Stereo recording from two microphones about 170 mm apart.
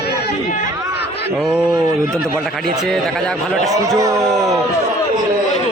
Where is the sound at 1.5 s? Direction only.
20° right (ahead or behind).